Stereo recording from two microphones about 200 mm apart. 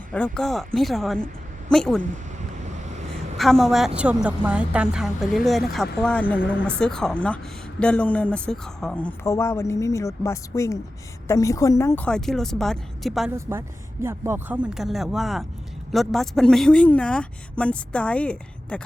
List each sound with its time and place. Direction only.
0.1 s a woman's voice: 5° left (ahead or behind)
2.4 s waves: 35° right (ahead or behind)
3.3 s a woman's voice: centre (ahead or behind)
13.3 s a woman's voice: 10° right (ahead or behind); by 18.8 s 5° left (ahead or behind)